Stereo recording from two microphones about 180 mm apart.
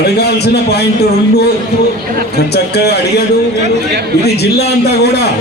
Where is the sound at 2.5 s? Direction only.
65° left (ahead or behind).